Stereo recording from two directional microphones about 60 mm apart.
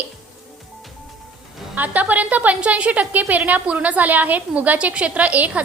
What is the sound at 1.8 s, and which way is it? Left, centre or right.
A woman's voice, right.